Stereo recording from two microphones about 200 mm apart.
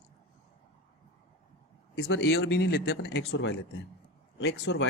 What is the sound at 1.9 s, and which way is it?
A man's voice, 55° left (ahead or behind).